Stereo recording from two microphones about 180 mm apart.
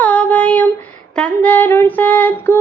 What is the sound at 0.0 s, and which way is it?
Child singing, 10° left (ahead or behind).